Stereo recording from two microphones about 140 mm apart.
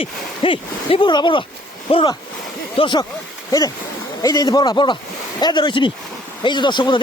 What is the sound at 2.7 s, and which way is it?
Speech, 35° left (ahead or behind).